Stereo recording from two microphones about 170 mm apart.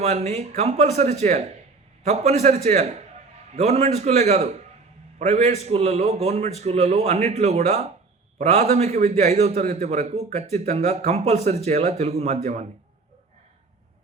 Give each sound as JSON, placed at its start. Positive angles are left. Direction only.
{"t": 0.0, "sound": "a man's voice", "side_deg": -40}